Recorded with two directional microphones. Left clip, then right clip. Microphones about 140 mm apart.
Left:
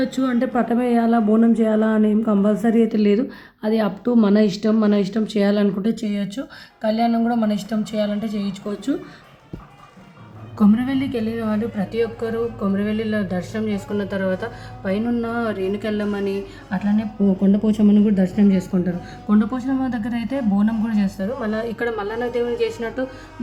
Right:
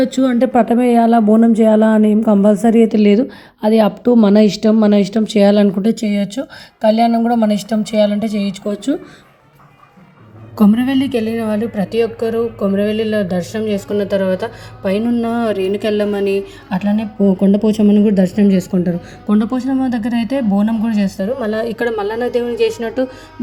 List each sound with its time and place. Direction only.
0.0 s a woman's voice: 35° right (ahead or behind)
10.6 s a woman's voice: 40° right (ahead or behind)